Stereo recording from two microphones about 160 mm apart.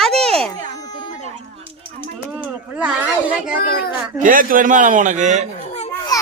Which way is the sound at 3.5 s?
70° left (ahead or behind).